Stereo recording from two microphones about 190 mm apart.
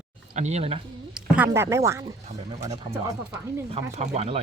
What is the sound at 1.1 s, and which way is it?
Speech, 10° right (ahead or behind).